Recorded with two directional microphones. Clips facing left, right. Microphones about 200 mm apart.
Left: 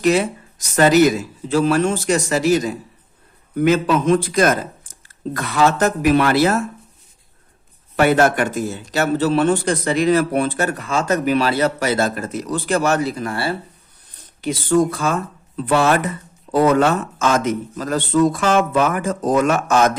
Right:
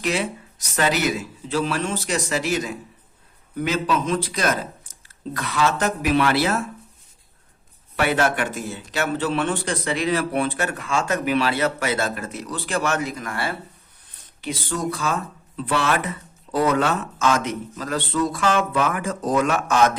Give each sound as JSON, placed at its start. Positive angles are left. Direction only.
{"t": 0.0, "sound": "a man's voice", "side_deg": 45}
{"t": 3.6, "sound": "a man's voice", "side_deg": 55}
{"t": 7.9, "sound": "a man's voice", "side_deg": 45}
{"t": 14.4, "sound": "a man's voice", "side_deg": 50}